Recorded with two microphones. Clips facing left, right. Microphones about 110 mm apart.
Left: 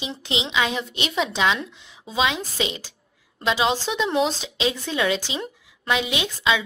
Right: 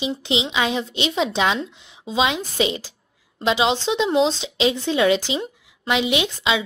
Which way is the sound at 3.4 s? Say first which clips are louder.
Right 2 dB; 25° right (ahead or behind).